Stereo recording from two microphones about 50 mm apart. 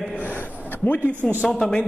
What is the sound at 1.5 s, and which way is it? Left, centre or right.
Speech, centre.